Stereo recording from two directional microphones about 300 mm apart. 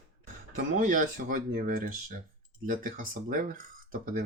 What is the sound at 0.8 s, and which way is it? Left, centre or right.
Speech, right.